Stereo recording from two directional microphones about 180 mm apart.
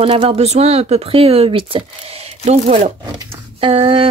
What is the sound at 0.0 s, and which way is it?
Speech, 30° right (ahead or behind).